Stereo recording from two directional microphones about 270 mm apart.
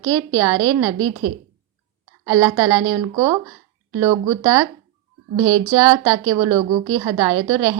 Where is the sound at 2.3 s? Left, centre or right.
Centre.